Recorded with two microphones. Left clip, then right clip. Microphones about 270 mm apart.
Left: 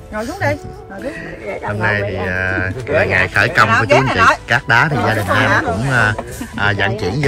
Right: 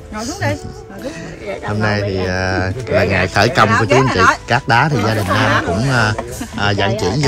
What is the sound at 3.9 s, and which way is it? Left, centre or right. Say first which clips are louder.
Speech: left 1 dB; left.